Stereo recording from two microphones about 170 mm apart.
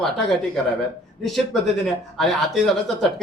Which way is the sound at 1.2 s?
Centre (ahead or behind).